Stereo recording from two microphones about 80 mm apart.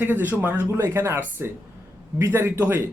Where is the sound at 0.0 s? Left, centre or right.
Right.